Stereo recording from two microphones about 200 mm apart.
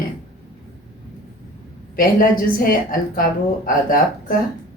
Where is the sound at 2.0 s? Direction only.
45° left (ahead or behind).